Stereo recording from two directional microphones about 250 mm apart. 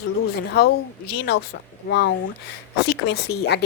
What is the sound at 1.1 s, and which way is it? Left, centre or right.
Speech, left.